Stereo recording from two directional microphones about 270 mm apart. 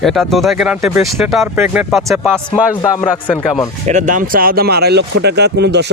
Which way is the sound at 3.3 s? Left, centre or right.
Centre.